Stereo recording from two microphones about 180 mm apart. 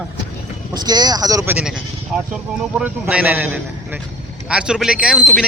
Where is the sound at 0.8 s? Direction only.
20° right (ahead or behind).